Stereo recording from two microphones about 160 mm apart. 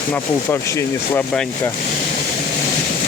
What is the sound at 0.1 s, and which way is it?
Speech, 15° left (ahead or behind).